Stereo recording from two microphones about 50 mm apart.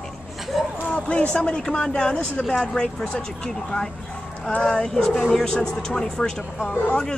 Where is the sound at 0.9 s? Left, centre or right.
Left.